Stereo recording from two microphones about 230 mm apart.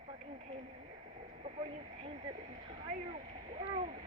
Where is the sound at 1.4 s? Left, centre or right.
Right.